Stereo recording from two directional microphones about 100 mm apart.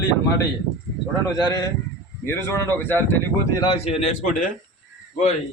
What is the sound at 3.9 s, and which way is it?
Speech, 90° left.